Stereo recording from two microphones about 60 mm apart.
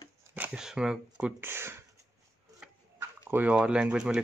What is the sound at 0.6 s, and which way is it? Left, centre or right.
Speech, centre.